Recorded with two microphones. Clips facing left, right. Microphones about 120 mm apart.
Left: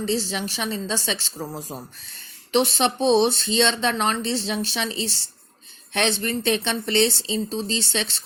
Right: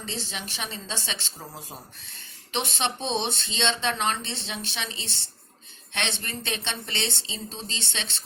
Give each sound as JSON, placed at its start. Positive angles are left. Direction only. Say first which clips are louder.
{"t": 0.0, "sound": "speech", "louder": "left 10 dB", "side_deg": 35}
{"t": 2.5, "sound": "speech", "louder": "left 8 dB", "side_deg": 35}